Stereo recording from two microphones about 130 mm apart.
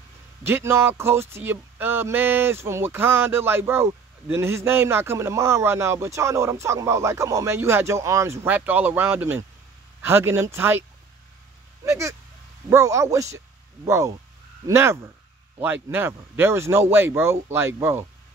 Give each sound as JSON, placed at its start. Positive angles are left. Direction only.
{"t": 0.4, "sound": "speech", "side_deg": -15}